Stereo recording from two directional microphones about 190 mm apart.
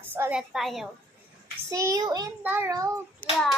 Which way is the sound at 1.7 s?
20° right (ahead or behind).